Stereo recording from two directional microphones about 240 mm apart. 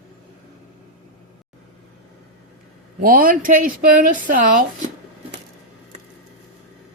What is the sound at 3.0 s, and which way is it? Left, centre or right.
Speech, right.